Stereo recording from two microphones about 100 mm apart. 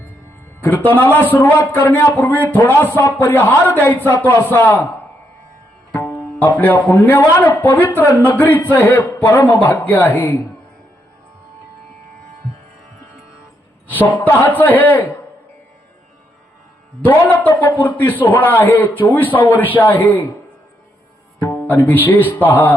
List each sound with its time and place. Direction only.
0.6 s a man's voice: 20° left (ahead or behind)
5.9 s tabla: 15° left (ahead or behind)
6.4 s a man's voice: 20° left (ahead or behind)
14.3 s a man's voice: 20° left (ahead or behind)
17.0 s a man's voice: 20° left (ahead or behind)
21.5 s music: 20° left (ahead or behind)
22.3 s a man's voice: 20° left (ahead or behind)